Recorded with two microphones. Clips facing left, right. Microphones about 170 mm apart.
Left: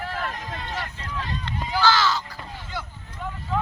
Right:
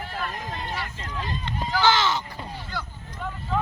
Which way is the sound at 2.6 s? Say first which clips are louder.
Even; 25° left (ahead or behind).